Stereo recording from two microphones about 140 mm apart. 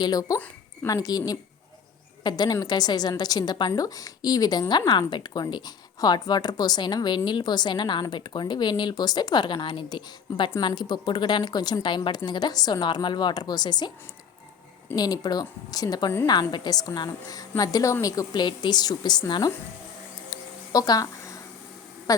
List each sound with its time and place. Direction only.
0.0 s a woman's voice: 25° left (ahead or behind)
14.9 s a woman's voice: 25° left (ahead or behind)
20.3 s a sound: 25° left (ahead or behind)